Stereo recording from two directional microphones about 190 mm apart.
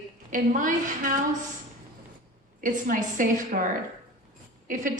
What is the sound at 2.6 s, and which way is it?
A woman's voice, 45° right (ahead or behind).